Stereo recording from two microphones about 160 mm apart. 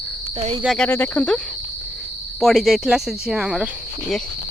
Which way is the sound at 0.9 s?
15° left (ahead or behind).